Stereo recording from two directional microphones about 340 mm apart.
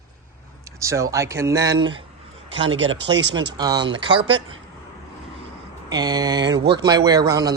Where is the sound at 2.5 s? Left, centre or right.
Right.